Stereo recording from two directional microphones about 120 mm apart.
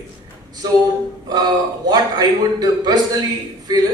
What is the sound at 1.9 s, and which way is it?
A man's voice, 35° right (ahead or behind).